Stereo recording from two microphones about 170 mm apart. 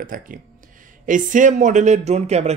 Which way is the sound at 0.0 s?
55° right (ahead or behind).